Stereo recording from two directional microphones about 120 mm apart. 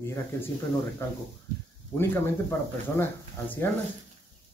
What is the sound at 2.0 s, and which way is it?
Speech, 20° left (ahead or behind).